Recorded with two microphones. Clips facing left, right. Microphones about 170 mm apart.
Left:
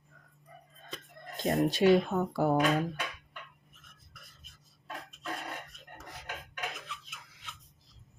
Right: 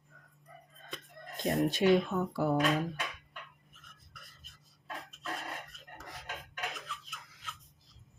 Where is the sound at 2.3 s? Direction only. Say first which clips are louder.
Left 3 dB; 45° left (ahead or behind).